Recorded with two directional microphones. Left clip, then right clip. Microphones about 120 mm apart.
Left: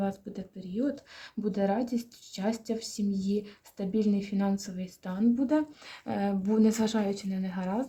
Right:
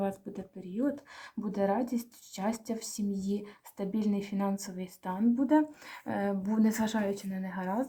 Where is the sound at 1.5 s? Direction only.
50° left (ahead or behind).